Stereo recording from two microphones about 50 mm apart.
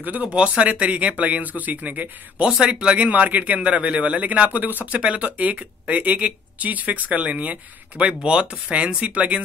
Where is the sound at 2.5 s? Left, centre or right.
Centre.